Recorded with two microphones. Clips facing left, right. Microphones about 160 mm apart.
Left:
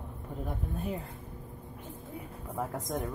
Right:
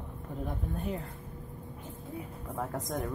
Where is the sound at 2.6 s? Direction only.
10° left (ahead or behind).